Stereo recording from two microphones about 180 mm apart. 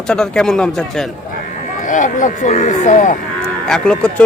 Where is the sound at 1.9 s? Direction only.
45° left (ahead or behind).